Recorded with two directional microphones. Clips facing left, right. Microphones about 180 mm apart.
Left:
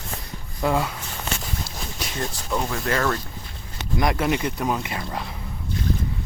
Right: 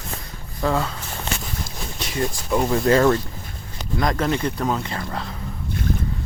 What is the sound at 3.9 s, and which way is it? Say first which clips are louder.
Speech: right 1 dB; 15° left (ahead or behind).